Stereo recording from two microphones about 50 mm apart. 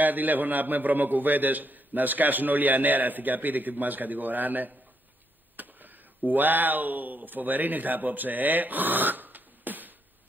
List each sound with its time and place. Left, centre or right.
0.0 s a man's voice: right